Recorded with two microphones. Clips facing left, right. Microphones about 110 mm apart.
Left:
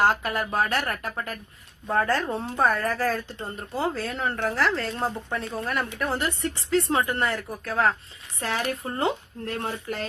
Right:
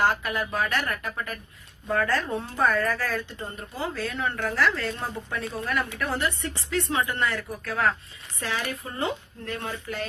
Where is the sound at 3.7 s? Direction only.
50° left (ahead or behind).